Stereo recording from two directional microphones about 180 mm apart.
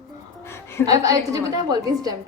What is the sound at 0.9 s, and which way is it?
A woman's voice, 20° right (ahead or behind).